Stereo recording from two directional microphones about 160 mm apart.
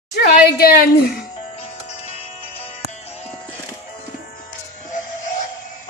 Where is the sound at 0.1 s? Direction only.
70° left (ahead or behind).